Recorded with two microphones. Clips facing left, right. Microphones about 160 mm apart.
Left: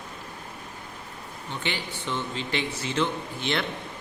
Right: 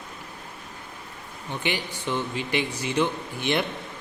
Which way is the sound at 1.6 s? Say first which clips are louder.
Right 4 dB; 15° right (ahead or behind).